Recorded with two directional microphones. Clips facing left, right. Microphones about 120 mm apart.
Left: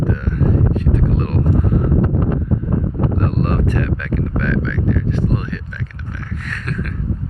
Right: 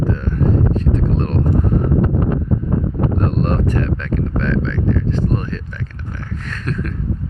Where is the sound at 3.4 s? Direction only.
30° right (ahead or behind).